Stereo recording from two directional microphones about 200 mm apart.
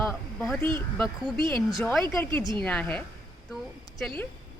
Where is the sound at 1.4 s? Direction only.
25° right (ahead or behind).